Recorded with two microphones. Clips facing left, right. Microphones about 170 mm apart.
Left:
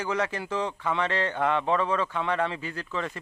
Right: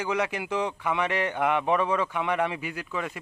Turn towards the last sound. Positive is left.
turn(degrees=-10)  # may be behind; listen again after turning